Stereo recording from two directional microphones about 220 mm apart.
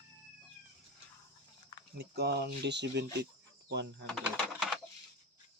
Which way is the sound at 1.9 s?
45° right (ahead or behind).